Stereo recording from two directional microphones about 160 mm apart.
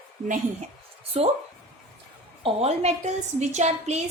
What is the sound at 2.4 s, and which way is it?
A woman's voice, 40° right (ahead or behind).